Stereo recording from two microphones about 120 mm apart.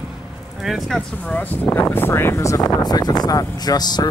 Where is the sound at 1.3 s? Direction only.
15° left (ahead or behind).